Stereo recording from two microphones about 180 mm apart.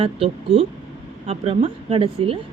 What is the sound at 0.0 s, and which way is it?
A woman's voice, 30° right (ahead or behind).